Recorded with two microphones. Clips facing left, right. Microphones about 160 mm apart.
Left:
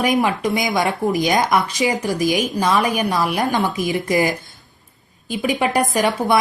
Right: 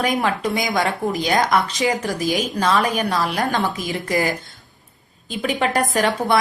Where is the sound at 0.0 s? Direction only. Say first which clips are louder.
Left 2 dB; 20° left (ahead or behind).